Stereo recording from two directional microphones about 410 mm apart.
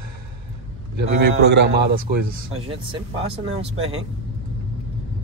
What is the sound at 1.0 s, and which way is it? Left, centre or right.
A man's voice, right.